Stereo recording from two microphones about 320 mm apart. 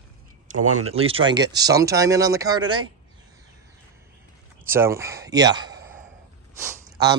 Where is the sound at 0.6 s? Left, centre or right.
Right.